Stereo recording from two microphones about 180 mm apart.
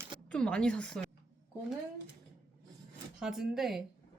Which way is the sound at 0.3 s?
5° left (ahead or behind).